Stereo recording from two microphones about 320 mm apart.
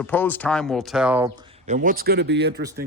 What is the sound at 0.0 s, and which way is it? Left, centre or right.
Speech, centre.